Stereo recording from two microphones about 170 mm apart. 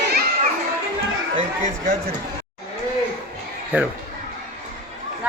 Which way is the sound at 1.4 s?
40° right (ahead or behind).